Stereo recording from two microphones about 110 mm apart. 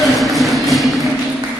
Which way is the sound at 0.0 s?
Centre (ahead or behind).